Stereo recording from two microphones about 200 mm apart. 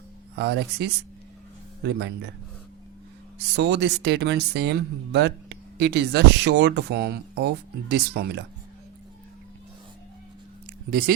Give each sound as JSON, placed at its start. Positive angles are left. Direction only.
{"t": 0.3, "sound": "speech", "side_deg": -55}
{"t": 3.5, "sound": "speech", "side_deg": -60}